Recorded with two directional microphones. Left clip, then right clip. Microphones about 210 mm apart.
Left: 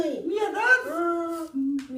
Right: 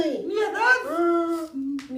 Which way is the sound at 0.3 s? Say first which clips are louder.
Even; centre (ahead or behind).